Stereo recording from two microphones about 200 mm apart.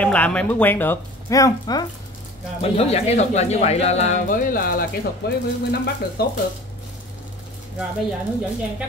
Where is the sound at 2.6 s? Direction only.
30° left (ahead or behind); by 6.3 s 50° left (ahead or behind).